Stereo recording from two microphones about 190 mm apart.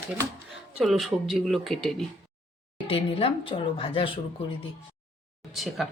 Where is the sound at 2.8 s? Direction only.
30° left (ahead or behind).